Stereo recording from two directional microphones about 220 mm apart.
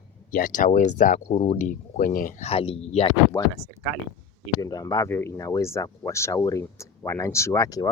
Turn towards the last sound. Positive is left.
turn(degrees=15)  # may be behind; listen again after turning